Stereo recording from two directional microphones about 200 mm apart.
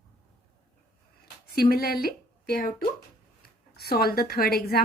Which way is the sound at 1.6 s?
50° left (ahead or behind).